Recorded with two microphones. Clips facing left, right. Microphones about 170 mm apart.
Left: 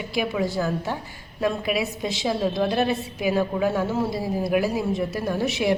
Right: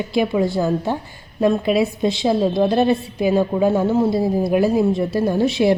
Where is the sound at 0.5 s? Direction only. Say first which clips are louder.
Right 6 dB; 25° right (ahead or behind).